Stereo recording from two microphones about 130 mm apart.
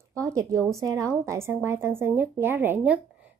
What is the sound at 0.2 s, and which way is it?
A woman's voice, 25° right (ahead or behind).